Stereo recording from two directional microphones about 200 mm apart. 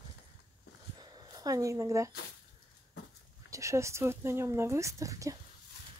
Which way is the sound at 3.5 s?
15° right (ahead or behind).